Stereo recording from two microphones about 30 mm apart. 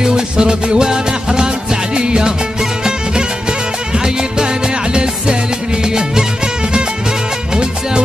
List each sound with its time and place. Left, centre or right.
0.0 s music: right
3.9 s music: right
5.9 s music: right